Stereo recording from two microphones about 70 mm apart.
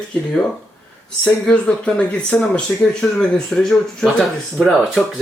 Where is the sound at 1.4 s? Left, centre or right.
Centre.